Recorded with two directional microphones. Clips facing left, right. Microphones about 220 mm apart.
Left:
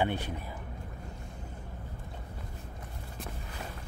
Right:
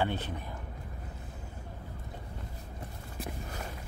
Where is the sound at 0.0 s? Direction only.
15° left (ahead or behind).